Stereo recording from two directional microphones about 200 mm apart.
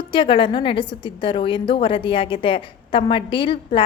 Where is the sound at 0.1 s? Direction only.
25° left (ahead or behind).